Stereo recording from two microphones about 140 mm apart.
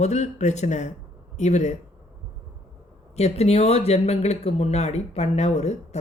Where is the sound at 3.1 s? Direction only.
50° left (ahead or behind).